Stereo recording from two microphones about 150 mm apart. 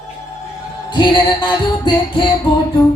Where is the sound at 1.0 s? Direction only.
30° left (ahead or behind).